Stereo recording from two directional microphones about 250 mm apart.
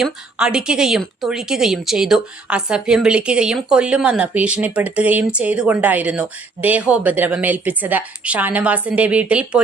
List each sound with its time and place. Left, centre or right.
0.0 s speech: centre